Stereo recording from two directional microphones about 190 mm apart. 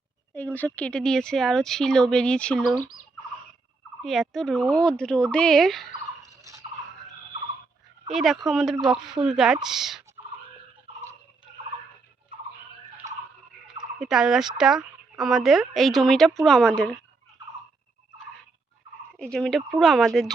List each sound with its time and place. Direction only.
0.3 s speech: 10° left (ahead or behind)
4.0 s speech: centre (ahead or behind)
6.2 s a sound: 15° right (ahead or behind)
8.1 s speech: centre (ahead or behind)
14.0 s speech: 5° right (ahead or behind)
19.2 s speech: 5° left (ahead or behind)